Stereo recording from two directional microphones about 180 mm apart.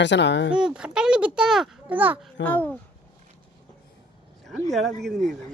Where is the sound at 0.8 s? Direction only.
5° right (ahead or behind).